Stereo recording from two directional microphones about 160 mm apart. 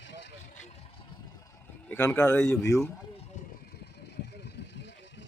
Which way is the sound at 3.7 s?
90° left.